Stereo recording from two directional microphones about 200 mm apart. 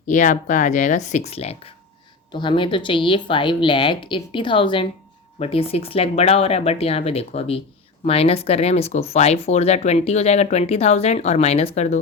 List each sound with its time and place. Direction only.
0.1 s speech: 40° left (ahead or behind)